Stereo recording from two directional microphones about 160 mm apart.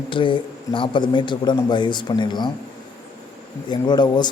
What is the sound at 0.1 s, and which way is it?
A man's voice, 30° left (ahead or behind).